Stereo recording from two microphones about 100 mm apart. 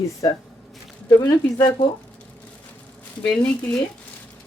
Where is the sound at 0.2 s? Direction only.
40° left (ahead or behind).